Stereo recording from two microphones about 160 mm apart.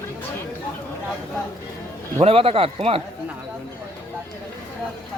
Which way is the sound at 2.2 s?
35° right (ahead or behind).